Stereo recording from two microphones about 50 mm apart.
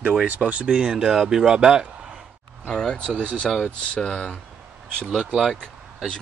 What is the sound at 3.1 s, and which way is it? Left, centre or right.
Speech, right.